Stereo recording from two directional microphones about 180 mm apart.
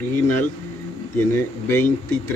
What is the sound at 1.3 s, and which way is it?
Speech, 15° left (ahead or behind).